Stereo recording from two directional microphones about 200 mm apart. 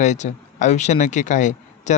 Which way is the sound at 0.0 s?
35° left (ahead or behind).